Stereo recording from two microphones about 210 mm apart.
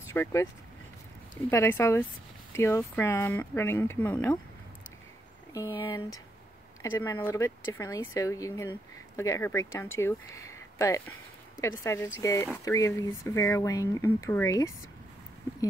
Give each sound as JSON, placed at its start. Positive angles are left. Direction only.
{"t": 0.1, "sound": "speech", "side_deg": 15}
{"t": 1.5, "sound": "speech", "side_deg": 10}
{"t": 5.5, "sound": "speech", "side_deg": 15}